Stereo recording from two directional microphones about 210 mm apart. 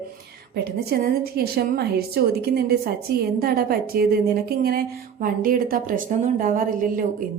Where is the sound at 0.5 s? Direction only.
50° right (ahead or behind).